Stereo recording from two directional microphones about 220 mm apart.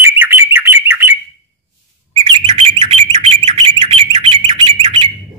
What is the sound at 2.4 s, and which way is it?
Bird, 25° right (ahead or behind).